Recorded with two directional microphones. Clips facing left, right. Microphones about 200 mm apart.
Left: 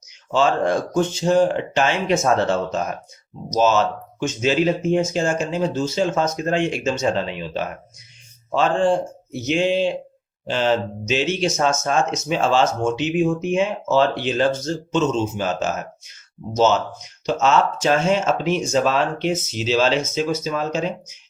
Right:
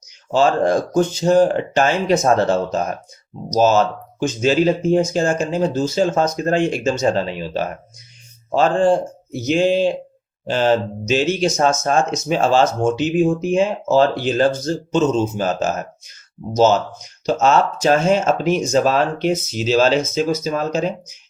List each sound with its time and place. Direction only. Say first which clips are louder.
0.3 s speech: right 3 dB; 35° right (ahead or behind)
17.2 s speech: right 2 dB; 40° right (ahead or behind)